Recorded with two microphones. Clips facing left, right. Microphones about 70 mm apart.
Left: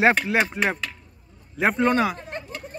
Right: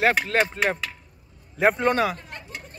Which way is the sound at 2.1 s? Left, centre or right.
Left.